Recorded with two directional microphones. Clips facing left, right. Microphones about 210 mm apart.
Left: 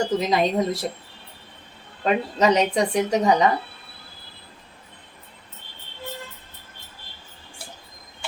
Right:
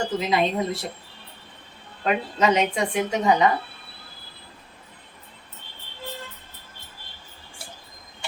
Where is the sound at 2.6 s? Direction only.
40° left (ahead or behind).